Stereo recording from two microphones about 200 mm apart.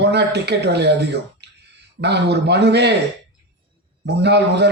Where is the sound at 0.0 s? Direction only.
60° right (ahead or behind).